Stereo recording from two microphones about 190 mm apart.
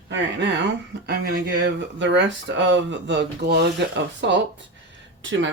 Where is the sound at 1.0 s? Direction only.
55° right (ahead or behind).